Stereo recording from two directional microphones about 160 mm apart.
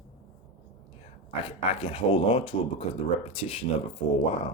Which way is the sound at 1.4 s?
35° left (ahead or behind).